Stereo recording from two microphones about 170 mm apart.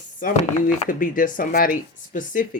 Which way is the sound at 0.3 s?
45° left (ahead or behind).